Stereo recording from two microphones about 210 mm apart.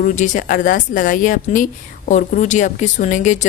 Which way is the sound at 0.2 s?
40° left (ahead or behind).